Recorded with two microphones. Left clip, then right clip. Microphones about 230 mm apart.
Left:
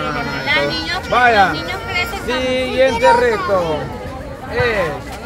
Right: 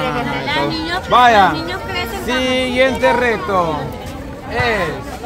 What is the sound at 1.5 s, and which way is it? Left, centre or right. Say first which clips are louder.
Speech: even; centre.